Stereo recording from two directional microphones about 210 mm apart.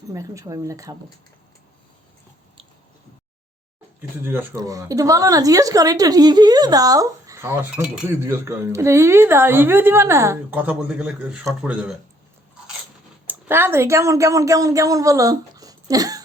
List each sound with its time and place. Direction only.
0.1 s speech: 15° right (ahead or behind)
4.2 s speech: 10° right (ahead or behind)
13.2 s a woman's voice: 10° right (ahead or behind)